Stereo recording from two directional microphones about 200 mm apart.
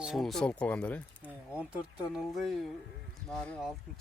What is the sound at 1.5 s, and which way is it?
Speech, 5° right (ahead or behind).